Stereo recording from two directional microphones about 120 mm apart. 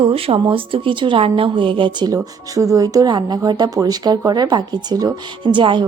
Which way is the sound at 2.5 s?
25° right (ahead or behind).